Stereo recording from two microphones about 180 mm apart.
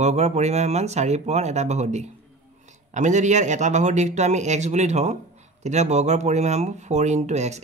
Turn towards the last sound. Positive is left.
turn(degrees=-40)  # may be behind; listen again after turning